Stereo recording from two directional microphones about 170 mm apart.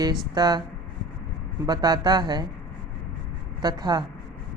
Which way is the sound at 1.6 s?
25° right (ahead or behind).